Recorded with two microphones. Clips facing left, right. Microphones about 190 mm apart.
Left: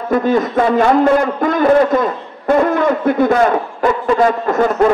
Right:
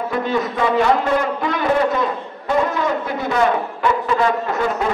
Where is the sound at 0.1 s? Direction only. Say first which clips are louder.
Left 10 dB; 45° left (ahead or behind).